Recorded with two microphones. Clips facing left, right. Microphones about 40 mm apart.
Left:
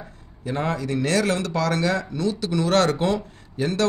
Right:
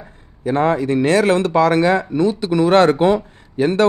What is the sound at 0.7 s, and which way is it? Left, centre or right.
Speech, right.